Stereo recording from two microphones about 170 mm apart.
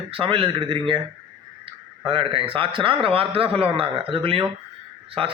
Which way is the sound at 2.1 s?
30° right (ahead or behind).